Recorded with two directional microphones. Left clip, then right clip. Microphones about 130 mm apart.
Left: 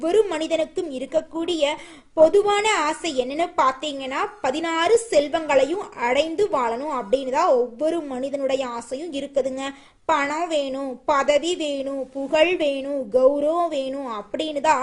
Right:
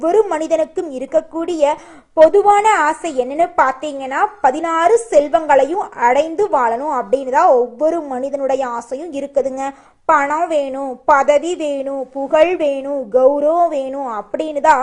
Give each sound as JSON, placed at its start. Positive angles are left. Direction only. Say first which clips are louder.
{"t": 0.0, "sound": "a woman's voice", "louder": "right 6 dB", "side_deg": 25}
{"t": 3.2, "sound": "a woman's voice", "louder": "right 7 dB", "side_deg": 20}